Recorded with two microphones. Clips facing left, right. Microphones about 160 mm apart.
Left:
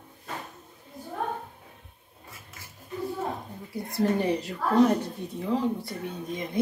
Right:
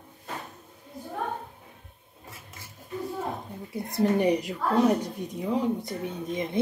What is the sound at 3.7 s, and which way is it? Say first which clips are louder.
Speech: right 1 dB; 20° right (ahead or behind).